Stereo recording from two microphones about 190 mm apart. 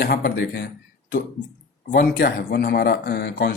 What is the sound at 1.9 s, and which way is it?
Speech, 55° left (ahead or behind).